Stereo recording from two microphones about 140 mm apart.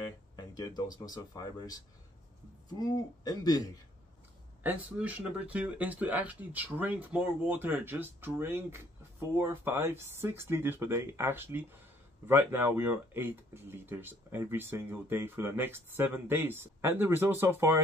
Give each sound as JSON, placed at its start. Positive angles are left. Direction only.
{"t": 0.4, "sound": "speech", "side_deg": 30}
{"t": 2.8, "sound": "speech", "side_deg": 25}
{"t": 4.6, "sound": "speech", "side_deg": -10}